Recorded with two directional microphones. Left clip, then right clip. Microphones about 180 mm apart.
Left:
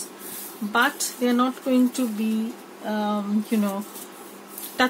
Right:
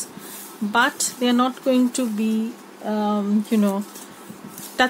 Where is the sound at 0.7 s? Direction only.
60° right (ahead or behind).